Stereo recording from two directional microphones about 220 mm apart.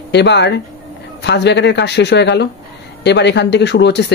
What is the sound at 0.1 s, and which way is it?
Speech, 50° left (ahead or behind).